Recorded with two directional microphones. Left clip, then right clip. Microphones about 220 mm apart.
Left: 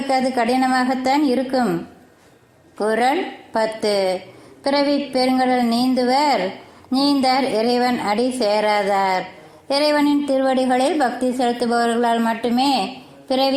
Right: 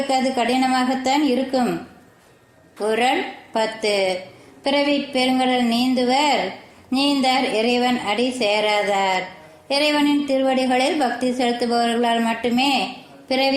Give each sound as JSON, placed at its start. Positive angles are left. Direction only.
{"t": 0.1, "sound": "a woman's voice", "side_deg": 30}
{"t": 2.7, "sound": "a woman's voice", "side_deg": 25}
{"t": 9.6, "sound": "speech", "side_deg": 10}
{"t": 9.9, "sound": "a woman's voice", "side_deg": 25}